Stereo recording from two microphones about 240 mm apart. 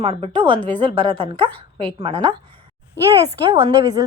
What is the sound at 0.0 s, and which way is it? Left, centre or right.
A woman's voice, right.